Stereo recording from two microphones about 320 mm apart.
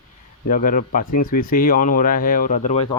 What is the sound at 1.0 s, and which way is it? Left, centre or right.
Speech, left.